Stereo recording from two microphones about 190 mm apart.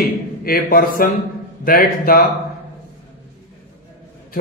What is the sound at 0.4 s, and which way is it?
A man's voice, 50° left (ahead or behind).